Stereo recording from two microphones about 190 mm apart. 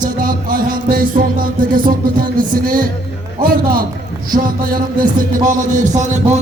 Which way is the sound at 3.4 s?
50° right (ahead or behind).